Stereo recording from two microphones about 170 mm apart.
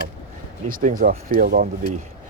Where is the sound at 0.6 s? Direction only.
55° right (ahead or behind).